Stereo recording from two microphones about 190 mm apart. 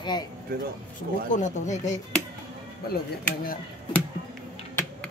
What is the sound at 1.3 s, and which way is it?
Speech, 40° left (ahead or behind).